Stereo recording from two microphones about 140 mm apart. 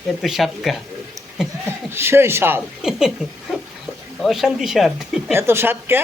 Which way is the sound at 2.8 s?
5° right (ahead or behind).